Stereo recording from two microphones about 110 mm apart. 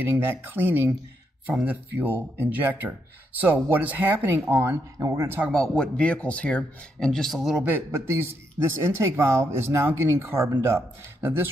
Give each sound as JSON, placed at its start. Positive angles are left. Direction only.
{"t": 0.0, "sound": "a man's voice", "side_deg": -20}
{"t": 5.5, "sound": "speech", "side_deg": 5}
{"t": 7.6, "sound": "a man's voice", "side_deg": -20}